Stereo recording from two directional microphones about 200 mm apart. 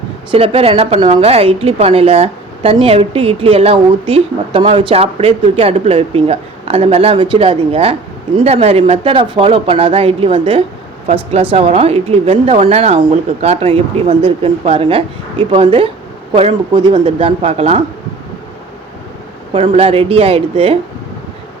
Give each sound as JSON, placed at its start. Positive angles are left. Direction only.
{"t": 0.3, "sound": "speech", "side_deg": -25}
{"t": 19.5, "sound": "speech", "side_deg": -30}